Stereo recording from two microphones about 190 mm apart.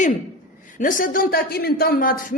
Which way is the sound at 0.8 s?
45° left (ahead or behind).